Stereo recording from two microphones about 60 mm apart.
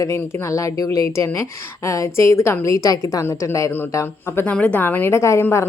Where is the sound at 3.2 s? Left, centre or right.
Left.